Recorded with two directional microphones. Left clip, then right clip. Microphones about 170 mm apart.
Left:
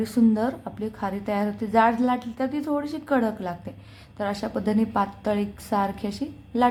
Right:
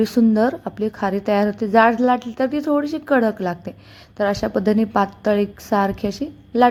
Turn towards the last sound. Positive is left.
turn(degrees=-25)  # may be behind; listen again after turning